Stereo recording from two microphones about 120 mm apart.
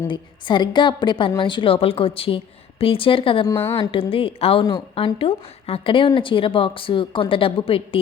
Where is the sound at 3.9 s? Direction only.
50° left (ahead or behind).